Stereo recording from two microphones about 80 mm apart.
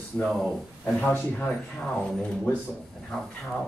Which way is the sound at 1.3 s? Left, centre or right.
Centre.